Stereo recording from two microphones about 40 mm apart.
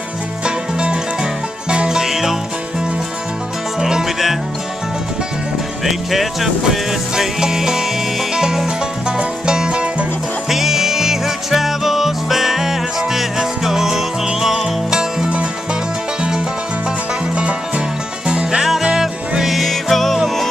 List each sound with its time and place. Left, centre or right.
1.7 s music: right
2.0 s music: centre
3.8 s music: centre
5.9 s music: centre; by 10.0 s right
10.5 s music: centre
17.4 s music: right
19.4 s music: centre